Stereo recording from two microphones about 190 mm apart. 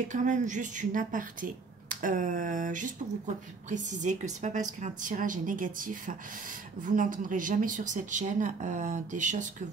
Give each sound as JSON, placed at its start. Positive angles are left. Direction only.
{"t": 0.1, "sound": "speech", "side_deg": -40}